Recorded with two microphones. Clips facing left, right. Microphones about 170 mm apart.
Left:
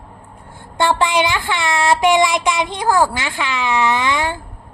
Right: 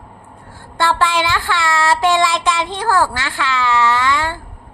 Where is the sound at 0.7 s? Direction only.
15° left (ahead or behind).